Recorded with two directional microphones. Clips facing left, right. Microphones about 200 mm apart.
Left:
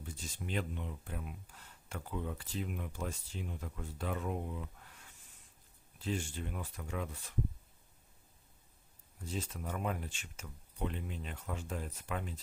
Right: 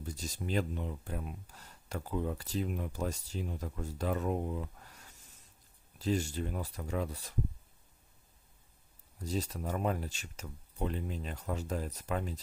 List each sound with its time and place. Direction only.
0.0 s speech: 40° right (ahead or behind)
9.2 s speech: 40° right (ahead or behind)